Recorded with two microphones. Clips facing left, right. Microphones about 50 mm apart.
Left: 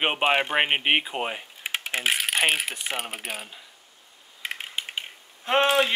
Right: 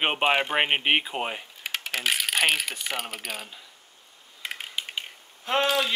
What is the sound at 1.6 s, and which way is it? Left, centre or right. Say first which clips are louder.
Typing: left 2 dB; left.